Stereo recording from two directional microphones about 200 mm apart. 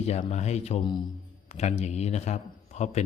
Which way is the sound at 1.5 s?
35° left (ahead or behind).